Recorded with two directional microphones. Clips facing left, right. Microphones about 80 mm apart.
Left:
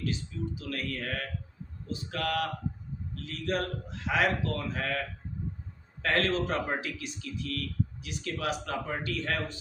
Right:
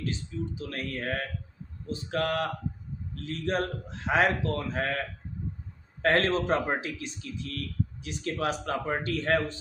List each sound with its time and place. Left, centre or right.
0.0 s a man's voice: right